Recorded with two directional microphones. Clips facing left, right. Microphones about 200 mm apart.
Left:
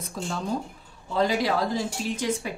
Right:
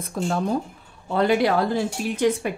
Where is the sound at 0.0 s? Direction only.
55° right (ahead or behind).